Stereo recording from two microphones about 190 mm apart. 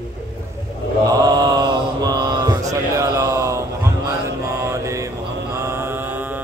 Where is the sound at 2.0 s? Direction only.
20° right (ahead or behind).